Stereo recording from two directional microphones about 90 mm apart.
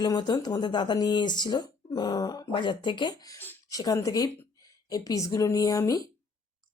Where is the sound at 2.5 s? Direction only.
60° left (ahead or behind); by 6.0 s 40° left (ahead or behind).